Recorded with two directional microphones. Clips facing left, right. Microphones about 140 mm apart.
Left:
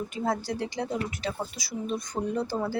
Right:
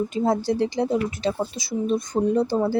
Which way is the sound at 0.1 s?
25° right (ahead or behind).